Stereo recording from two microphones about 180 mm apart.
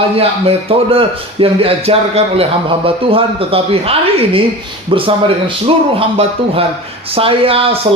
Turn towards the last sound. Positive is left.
turn(degrees=-30)  # may be behind; listen again after turning